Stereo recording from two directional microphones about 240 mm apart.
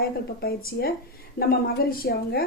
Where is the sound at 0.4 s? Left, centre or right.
Left.